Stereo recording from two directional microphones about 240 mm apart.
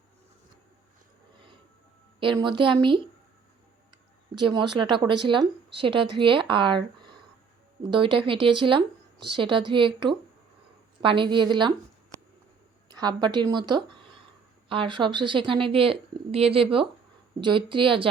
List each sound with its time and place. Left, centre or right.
2.4 s speech: centre
4.4 s speech: centre
7.9 s speech: right
12.9 s speech: centre